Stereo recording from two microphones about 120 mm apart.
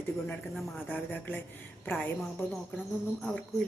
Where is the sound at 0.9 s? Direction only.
15° left (ahead or behind).